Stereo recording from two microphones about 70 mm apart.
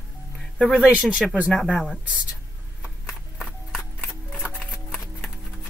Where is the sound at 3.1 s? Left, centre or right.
Centre.